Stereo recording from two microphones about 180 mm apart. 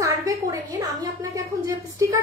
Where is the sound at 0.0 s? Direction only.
20° right (ahead or behind).